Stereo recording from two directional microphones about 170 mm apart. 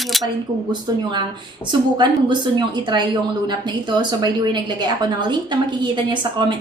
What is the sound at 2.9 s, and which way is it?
A woman's voice, 25° right (ahead or behind).